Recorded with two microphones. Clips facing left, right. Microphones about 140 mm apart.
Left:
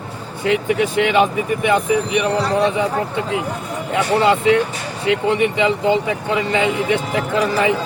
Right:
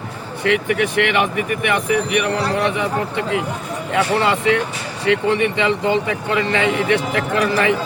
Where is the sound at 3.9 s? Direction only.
20° left (ahead or behind).